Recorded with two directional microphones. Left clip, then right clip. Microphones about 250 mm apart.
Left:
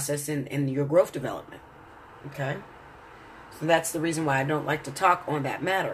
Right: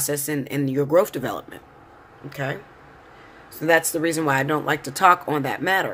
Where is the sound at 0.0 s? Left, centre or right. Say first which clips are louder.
Right 4 dB; right.